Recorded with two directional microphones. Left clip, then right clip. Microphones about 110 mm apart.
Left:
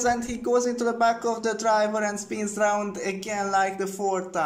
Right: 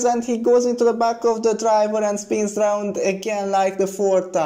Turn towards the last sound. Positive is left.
turn(degrees=-25)  # may be behind; listen again after turning